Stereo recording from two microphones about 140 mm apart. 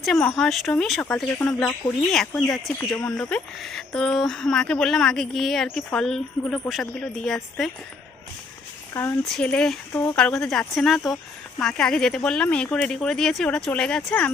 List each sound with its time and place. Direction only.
0.0 s speech: 5° left (ahead or behind)
8.9 s speech: 20° left (ahead or behind)
9.3 s speech: 5° left (ahead or behind)